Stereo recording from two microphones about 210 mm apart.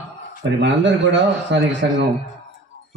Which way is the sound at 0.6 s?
55° right (ahead or behind).